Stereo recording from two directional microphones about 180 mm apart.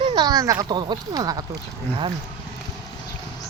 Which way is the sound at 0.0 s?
25° right (ahead or behind).